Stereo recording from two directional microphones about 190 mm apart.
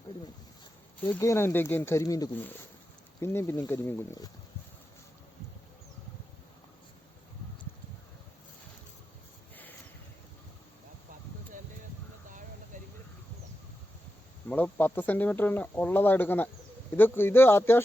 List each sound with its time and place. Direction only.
1.1 s speech: 15° left (ahead or behind)
12.3 s a sound: 45° right (ahead or behind)
14.5 s speech: 10° left (ahead or behind)